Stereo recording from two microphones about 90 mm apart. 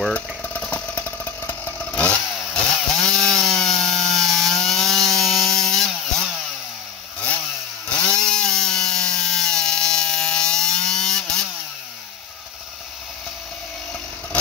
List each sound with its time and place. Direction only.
0.1 s engine: 20° left (ahead or behind)
0.6 s motorcycle: 15° left (ahead or behind)
2.5 s chainsaw: 10° left (ahead or behind)
8.0 s a sound: 10° left (ahead or behind)